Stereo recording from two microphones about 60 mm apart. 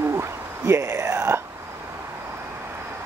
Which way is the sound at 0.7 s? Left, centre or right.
Right.